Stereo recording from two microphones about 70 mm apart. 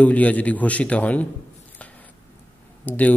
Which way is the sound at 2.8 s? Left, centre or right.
Left.